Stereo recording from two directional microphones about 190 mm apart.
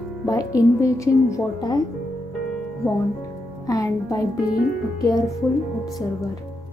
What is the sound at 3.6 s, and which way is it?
Speech, 20° left (ahead or behind).